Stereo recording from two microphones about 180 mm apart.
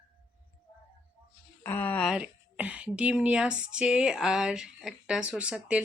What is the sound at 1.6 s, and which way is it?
Speech, 10° left (ahead or behind).